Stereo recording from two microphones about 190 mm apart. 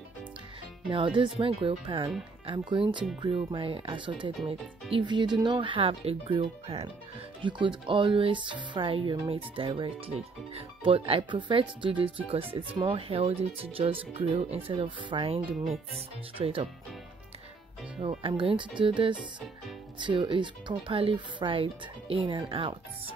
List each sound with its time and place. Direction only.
0.8 s speech: 25° right (ahead or behind)
18.2 s speech: 30° right (ahead or behind)